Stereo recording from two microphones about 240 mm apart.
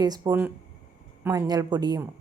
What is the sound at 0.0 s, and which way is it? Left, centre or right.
Speech, centre.